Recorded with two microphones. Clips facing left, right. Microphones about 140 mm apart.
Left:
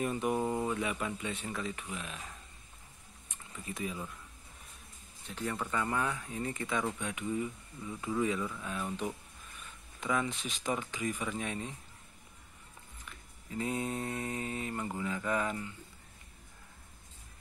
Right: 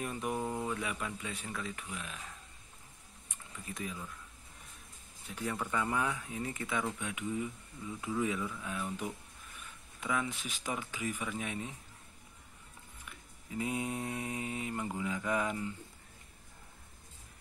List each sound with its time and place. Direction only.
0.0 s speech: centre (ahead or behind)
3.3 s typing: 5° left (ahead or behind)
5.2 s mantra: 10° right (ahead or behind)
7.0 s speech: 5° right (ahead or behind)
10.4 s mantra: 5° right (ahead or behind)
13.0 s mantra: 10° right (ahead or behind)